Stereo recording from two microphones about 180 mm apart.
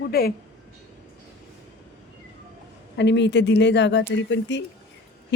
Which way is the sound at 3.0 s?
80° left.